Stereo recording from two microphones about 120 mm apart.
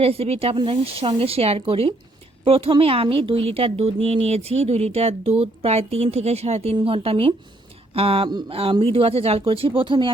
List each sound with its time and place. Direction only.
0.0 s speech: 55° right (ahead or behind)
8.3 s a sound: 35° right (ahead or behind)
8.8 s speech: 55° right (ahead or behind)